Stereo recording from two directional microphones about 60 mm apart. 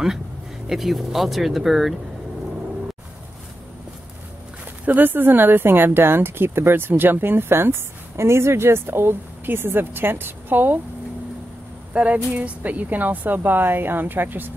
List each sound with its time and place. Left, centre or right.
0.7 s speech: centre
4.8 s speech: right
11.9 s speech: right